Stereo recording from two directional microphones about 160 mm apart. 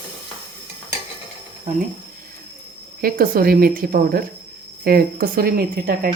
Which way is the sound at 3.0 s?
65° right (ahead or behind).